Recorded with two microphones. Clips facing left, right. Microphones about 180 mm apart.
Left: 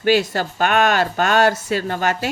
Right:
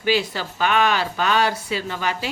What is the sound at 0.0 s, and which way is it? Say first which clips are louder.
A woman's voice: left 5 dB; 50° left (ahead or behind).